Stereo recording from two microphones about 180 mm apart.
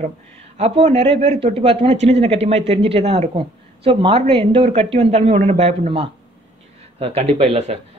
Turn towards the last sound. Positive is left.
turn(degrees=-35)  # may be behind; listen again after turning